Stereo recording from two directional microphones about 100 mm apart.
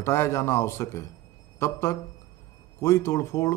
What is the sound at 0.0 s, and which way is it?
A man's voice, 25° left (ahead or behind).